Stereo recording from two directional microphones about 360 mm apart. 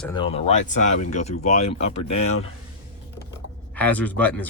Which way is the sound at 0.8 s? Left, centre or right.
Left.